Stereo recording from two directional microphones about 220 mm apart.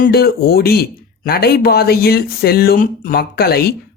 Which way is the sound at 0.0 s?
45° left (ahead or behind).